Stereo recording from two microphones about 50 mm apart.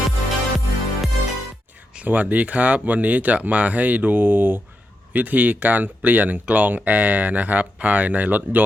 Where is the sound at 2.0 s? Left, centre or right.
Right.